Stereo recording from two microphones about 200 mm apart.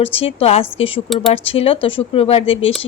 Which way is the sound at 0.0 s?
30° left (ahead or behind).